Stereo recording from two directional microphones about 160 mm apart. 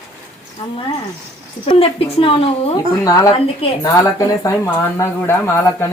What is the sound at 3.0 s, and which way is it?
A woman's voice, 25° left (ahead or behind).